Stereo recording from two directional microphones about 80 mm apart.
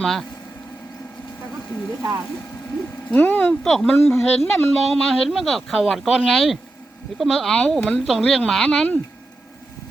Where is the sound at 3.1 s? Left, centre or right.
Left.